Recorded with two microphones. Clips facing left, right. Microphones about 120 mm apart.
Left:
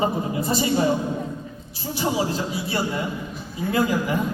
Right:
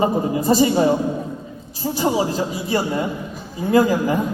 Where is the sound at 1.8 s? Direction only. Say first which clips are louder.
Right 4 dB; 40° right (ahead or behind).